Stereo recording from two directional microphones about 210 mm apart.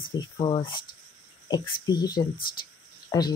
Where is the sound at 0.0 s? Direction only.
20° left (ahead or behind).